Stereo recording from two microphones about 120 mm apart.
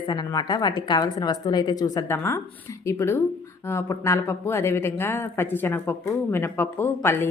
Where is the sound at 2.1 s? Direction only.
20° left (ahead or behind).